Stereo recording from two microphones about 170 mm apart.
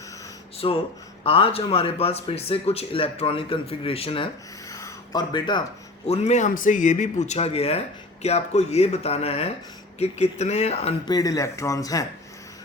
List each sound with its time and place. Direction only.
0.6 s speech: 30° left (ahead or behind)
4.7 s a sound: 20° left (ahead or behind)
6.1 s speech: 40° left (ahead or behind)
11.1 s speech: 20° left (ahead or behind)